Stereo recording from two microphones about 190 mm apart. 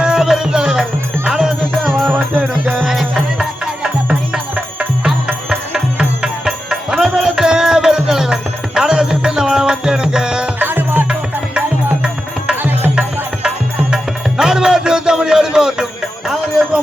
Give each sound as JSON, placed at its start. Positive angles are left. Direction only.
{"t": 0.0, "sound": "music", "side_deg": -5}